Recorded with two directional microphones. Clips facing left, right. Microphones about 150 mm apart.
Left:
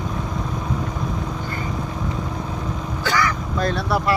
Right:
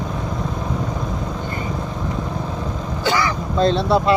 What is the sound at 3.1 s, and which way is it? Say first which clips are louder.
Vehicle: right 2 dB; 25° right (ahead or behind).